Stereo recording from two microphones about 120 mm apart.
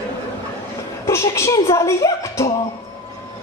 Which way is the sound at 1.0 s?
25° left (ahead or behind).